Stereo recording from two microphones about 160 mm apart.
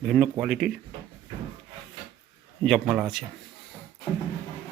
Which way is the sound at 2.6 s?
Centre (ahead or behind).